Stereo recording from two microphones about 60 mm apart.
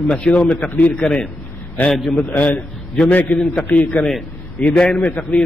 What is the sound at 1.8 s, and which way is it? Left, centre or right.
A man's voice, left.